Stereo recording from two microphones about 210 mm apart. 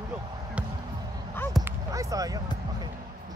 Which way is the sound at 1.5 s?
15° right (ahead or behind).